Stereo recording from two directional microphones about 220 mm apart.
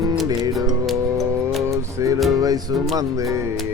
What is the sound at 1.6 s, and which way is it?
Music, 15° right (ahead or behind).